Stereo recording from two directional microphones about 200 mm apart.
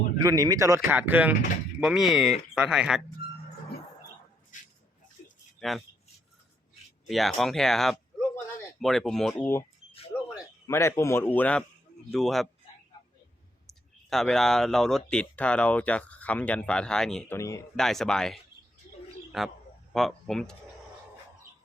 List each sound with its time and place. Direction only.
0.2 s speech: 15° right (ahead or behind)
5.5 s speech: centre (ahead or behind)
7.1 s speech: centre (ahead or behind)
10.3 s speech: 15° left (ahead or behind)
14.1 s speech: centre (ahead or behind)
17.3 s speech: 15° left (ahead or behind)
17.7 s speech: centre (ahead or behind)